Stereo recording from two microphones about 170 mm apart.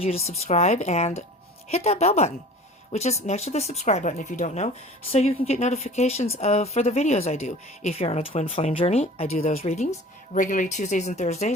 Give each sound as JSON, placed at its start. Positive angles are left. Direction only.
{"t": 0.0, "sound": "a woman's voice", "side_deg": 35}